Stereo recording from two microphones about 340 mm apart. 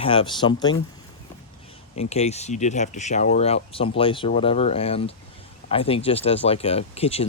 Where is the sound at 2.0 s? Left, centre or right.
Centre.